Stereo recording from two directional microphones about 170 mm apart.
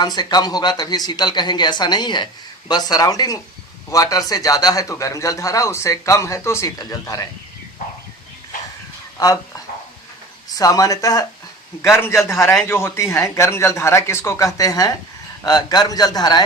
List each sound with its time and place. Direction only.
0.2 s a man's voice: 25° left (ahead or behind)
9.1 s speech: 20° left (ahead or behind)
10.5 s a man's voice: 20° left (ahead or behind)